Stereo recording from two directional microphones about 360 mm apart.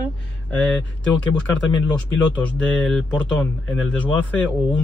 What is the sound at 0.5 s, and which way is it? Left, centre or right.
Speech, centre.